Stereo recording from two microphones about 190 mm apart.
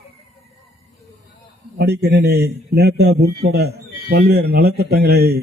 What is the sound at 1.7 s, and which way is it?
A man's voice, 60° right (ahead or behind).